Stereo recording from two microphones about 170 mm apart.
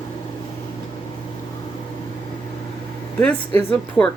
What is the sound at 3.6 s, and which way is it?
Speech, 10° left (ahead or behind).